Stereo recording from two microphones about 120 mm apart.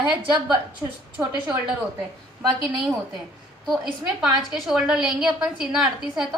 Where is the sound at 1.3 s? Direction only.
40° right (ahead or behind).